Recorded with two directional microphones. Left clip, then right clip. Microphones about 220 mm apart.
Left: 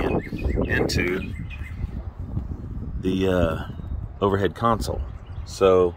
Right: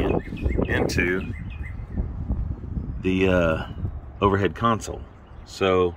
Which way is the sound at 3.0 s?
35° right (ahead or behind).